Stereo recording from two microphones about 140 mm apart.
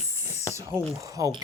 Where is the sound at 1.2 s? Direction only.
25° right (ahead or behind).